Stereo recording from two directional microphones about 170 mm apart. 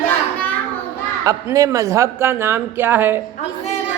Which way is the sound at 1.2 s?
20° right (ahead or behind).